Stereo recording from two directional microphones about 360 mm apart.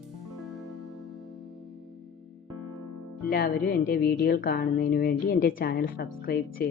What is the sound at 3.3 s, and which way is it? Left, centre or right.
A woman's voice, left.